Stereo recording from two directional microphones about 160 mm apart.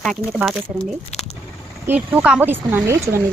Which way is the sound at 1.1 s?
40° left (ahead or behind).